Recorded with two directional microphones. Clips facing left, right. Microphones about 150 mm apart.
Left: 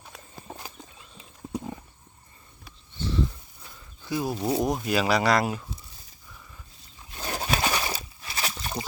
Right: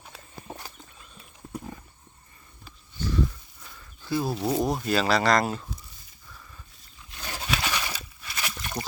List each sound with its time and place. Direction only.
0.0 s horse: centre (ahead or behind)
1.5 s wild animals: 20° left (ahead or behind)
3.6 s speech: 15° left (ahead or behind)
7.1 s a sound: 40° left (ahead or behind)